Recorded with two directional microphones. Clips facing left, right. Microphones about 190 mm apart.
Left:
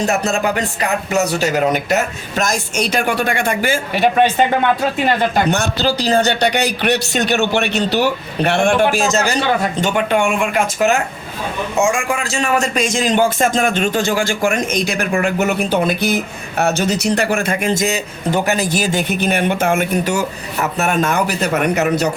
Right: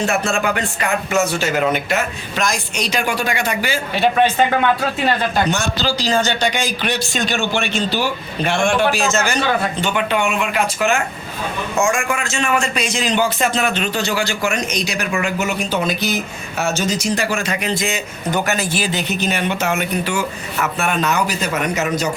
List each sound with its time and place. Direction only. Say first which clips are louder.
0.0 s speech: left 2 dB; 40° left (ahead or behind)
3.9 s speech: left 1 dB; 15° left (ahead or behind)
5.5 s speech: left 3 dB; 60° left (ahead or behind)
8.9 s speech: left 2 dB; 40° left (ahead or behind); by 22.1 s 60° left (ahead or behind)